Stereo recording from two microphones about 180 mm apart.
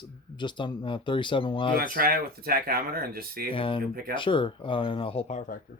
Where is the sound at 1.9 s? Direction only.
55° right (ahead or behind).